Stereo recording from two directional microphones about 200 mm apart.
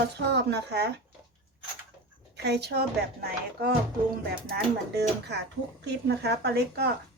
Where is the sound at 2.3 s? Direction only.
55° right (ahead or behind).